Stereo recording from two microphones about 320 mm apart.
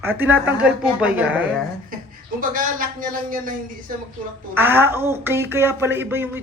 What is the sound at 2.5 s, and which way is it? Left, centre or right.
A man's voice, right.